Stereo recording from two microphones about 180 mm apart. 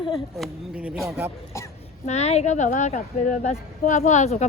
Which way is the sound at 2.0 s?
35° left (ahead or behind).